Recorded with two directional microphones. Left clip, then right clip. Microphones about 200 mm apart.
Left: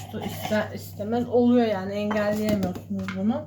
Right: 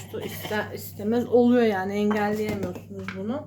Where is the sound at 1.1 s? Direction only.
50° right (ahead or behind).